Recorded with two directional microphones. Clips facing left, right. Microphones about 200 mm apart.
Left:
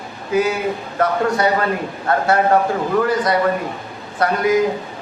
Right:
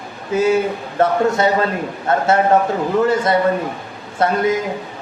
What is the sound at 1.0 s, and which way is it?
A man's voice, 25° right (ahead or behind).